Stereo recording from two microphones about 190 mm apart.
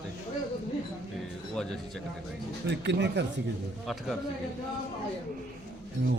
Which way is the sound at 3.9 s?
Centre (ahead or behind).